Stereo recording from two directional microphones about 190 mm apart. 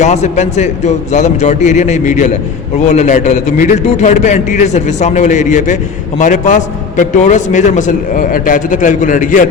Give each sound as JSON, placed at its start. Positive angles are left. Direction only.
{"t": 0.0, "sound": "a man's voice", "side_deg": 40}